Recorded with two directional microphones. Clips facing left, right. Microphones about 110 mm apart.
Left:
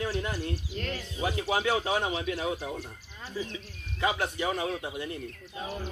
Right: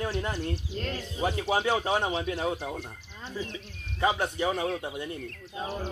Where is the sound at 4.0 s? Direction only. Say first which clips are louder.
Right 2 dB; 25° right (ahead or behind).